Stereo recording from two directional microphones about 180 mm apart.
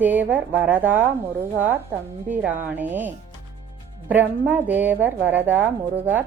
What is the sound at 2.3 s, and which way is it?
A woman's voice, 10° right (ahead or behind).